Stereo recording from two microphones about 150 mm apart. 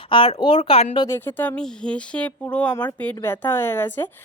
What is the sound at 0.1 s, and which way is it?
Speech, 35° left (ahead or behind).